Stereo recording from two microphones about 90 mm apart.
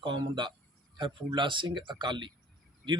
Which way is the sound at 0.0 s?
60° right (ahead or behind).